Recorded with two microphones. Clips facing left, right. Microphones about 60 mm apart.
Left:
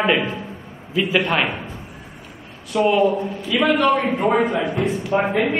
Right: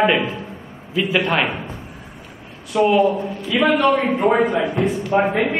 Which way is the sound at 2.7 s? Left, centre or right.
Centre.